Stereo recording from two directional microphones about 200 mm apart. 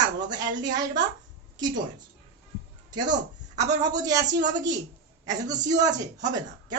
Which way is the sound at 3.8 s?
20° right (ahead or behind).